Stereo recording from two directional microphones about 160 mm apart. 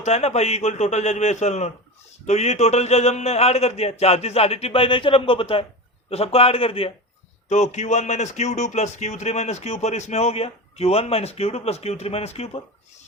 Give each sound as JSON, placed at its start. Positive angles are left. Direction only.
{"t": 0.0, "sound": "a man's voice", "side_deg": 45}
{"t": 7.5, "sound": "speech", "side_deg": 45}